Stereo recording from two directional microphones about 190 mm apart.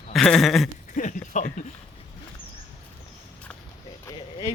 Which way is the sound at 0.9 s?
40° left (ahead or behind).